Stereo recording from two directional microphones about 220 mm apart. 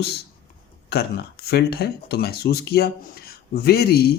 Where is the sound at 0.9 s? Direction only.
45° left (ahead or behind).